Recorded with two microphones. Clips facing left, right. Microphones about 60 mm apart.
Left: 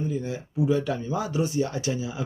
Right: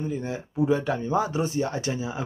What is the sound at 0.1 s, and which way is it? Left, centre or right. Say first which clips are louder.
Speech: even; right.